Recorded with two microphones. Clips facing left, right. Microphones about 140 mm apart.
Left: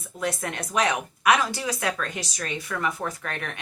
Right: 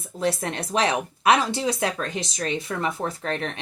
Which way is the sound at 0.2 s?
30° right (ahead or behind).